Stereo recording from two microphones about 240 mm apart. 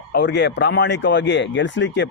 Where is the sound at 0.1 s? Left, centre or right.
Left.